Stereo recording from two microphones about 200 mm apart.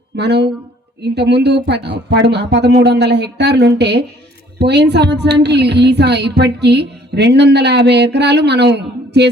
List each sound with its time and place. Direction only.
0.2 s a woman's voice: 55° right (ahead or behind)